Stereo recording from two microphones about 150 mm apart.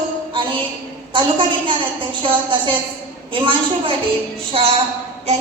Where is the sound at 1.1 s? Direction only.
35° right (ahead or behind).